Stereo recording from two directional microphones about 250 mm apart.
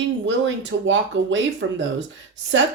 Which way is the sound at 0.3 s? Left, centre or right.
Right.